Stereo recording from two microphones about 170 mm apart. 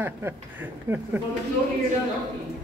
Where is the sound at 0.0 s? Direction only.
15° right (ahead or behind).